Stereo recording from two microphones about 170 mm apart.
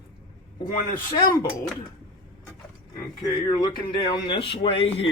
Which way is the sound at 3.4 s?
25° left (ahead or behind).